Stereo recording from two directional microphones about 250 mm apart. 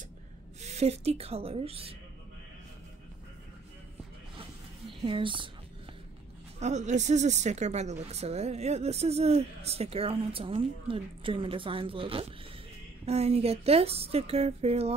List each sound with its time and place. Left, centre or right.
0.6 s a woman's voice: right
5.0 s a woman's voice: centre
6.6 s a woman's voice: right